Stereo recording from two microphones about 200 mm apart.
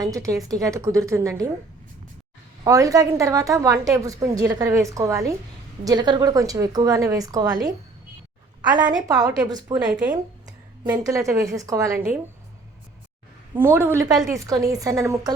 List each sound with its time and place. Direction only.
0.0 s a woman's voice: 15° right (ahead or behind)
2.6 s a woman's voice: 15° right (ahead or behind)
8.7 s a woman's voice: 20° right (ahead or behind)
13.6 s a woman's voice: 10° right (ahead or behind)